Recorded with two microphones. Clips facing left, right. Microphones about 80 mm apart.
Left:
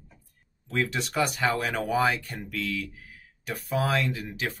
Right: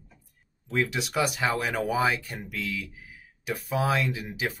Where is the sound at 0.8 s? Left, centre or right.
Centre.